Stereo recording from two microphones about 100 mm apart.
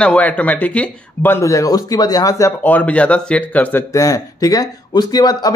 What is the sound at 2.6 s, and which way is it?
A man's voice, 15° left (ahead or behind).